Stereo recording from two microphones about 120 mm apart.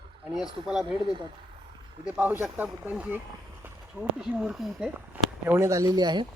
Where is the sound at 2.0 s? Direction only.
15° right (ahead or behind).